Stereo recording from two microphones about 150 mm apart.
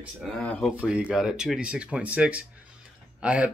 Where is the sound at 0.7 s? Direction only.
10° right (ahead or behind).